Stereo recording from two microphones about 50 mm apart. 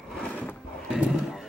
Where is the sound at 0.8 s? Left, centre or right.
Centre.